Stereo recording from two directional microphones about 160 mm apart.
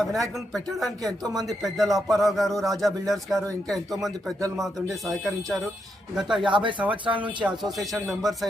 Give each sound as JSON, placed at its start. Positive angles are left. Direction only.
{"t": 0.0, "sound": "speech", "side_deg": 0}
{"t": 6.4, "sound": "speech", "side_deg": -30}
{"t": 7.4, "sound": "speech", "side_deg": 0}